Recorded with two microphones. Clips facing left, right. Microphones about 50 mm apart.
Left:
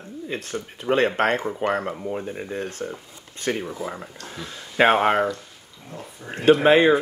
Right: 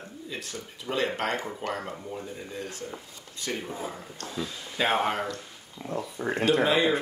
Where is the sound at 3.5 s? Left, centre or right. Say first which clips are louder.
Left 7 dB; left.